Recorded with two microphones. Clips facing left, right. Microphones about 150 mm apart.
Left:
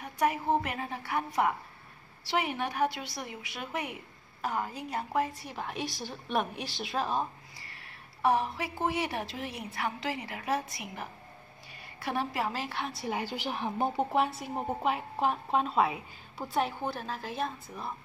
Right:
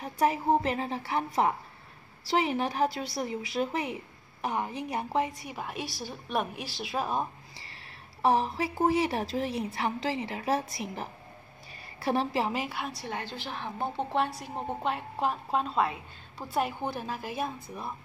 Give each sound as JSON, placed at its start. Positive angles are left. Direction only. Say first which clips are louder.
{"t": 0.0, "sound": "a woman's voice", "louder": "right 2 dB", "side_deg": -30}
{"t": 7.5, "sound": "a woman's voice", "louder": "right 1 dB", "side_deg": -30}
{"t": 12.5, "sound": "a woman's voice", "louder": "right 2 dB", "side_deg": -5}
{"t": 14.1, "sound": "a woman's voice", "louder": "left 1 dB", "side_deg": 5}
{"t": 16.8, "sound": "a woman's voice", "louder": "right 1 dB", "side_deg": -15}